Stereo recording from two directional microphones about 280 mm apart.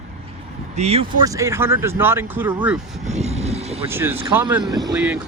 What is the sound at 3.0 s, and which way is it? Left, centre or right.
Vehicle, right.